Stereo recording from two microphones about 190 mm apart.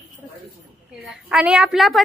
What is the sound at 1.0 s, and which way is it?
Speech, 5° right (ahead or behind).